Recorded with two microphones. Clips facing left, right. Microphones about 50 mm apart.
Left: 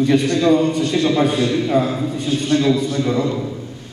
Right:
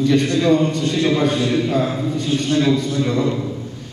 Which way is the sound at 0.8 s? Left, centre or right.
Left.